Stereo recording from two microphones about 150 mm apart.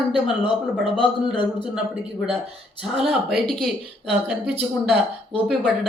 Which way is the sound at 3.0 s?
Centre (ahead or behind).